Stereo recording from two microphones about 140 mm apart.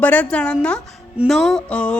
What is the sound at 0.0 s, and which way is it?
A man's voice, 10° left (ahead or behind).